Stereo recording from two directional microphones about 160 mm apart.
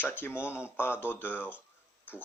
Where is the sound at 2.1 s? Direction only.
10° left (ahead or behind).